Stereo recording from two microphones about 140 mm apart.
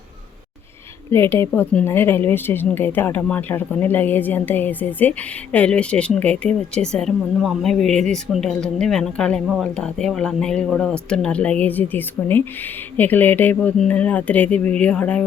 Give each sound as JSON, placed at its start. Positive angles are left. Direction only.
{"t": 1.1, "sound": "a woman's voice", "side_deg": 20}